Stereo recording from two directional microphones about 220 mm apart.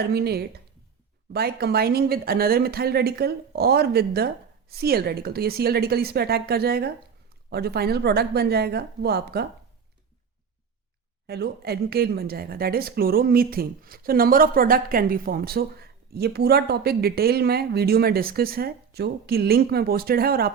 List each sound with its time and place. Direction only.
0.0 s a woman's voice: 45° right (ahead or behind)
11.3 s a woman's voice: 45° right (ahead or behind)